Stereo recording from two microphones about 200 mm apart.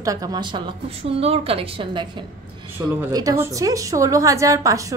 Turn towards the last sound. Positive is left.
turn(degrees=-15)  # may be behind; listen again after turning